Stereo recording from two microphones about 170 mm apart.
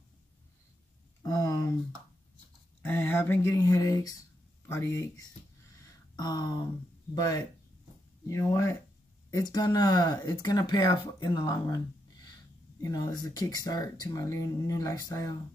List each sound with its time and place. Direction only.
1.2 s a sound: 20° left (ahead or behind)
2.8 s speech: 10° left (ahead or behind)
6.1 s speech: 25° left (ahead or behind)